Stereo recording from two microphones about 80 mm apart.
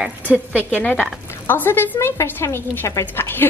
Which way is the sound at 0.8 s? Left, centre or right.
Centre.